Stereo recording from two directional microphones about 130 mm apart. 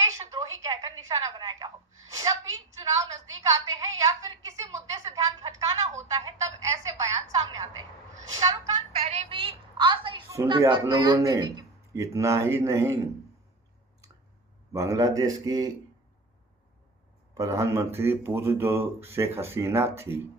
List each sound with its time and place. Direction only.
0.0 s a sound: 25° right (ahead or behind)
8.3 s speech: 30° right (ahead or behind)
9.0 s a sound: 55° right (ahead or behind)
10.7 s speech: 35° right (ahead or behind)
14.7 s speech: 25° right (ahead or behind)
17.3 s speech: 25° right (ahead or behind)